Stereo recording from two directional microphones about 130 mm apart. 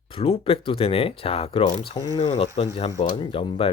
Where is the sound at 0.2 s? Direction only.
45° left (ahead or behind).